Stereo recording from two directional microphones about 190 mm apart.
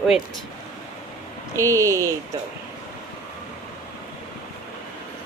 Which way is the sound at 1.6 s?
15° right (ahead or behind).